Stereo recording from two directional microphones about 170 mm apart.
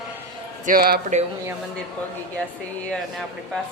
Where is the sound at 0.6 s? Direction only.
60° right (ahead or behind).